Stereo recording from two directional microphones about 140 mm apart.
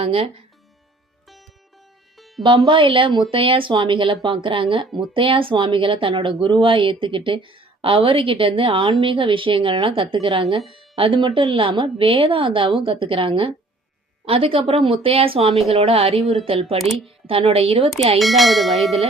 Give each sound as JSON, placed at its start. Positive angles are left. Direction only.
{"t": 0.0, "sound": "a woman's voice", "side_deg": -40}
{"t": 2.1, "sound": "music", "side_deg": 0}
{"t": 2.6, "sound": "a woman's voice", "side_deg": -40}
{"t": 11.2, "sound": "a woman's voice", "side_deg": -30}
{"t": 16.2, "sound": "speech", "side_deg": 0}
{"t": 16.5, "sound": "speech", "side_deg": -45}
{"t": 18.2, "sound": "speech", "side_deg": 0}